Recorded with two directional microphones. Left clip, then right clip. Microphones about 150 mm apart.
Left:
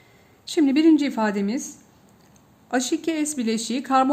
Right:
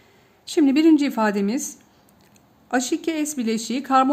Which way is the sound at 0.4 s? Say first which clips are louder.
Right 1 dB; 15° right (ahead or behind).